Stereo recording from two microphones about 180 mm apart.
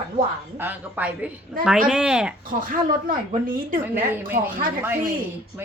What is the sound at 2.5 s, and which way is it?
Speech, 50° right (ahead or behind).